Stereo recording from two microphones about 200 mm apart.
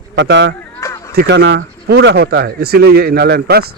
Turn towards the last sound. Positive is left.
turn(degrees=-50)  # may be behind; listen again after turning